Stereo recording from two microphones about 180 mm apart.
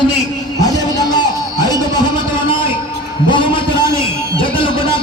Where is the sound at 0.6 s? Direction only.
20° left (ahead or behind).